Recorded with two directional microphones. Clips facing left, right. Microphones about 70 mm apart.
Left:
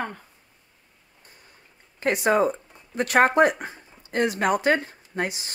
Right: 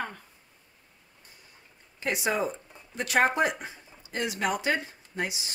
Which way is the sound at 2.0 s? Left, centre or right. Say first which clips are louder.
Left 7 dB; left.